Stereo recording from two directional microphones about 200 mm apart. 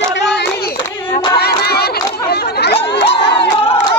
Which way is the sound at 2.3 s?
55° left (ahead or behind).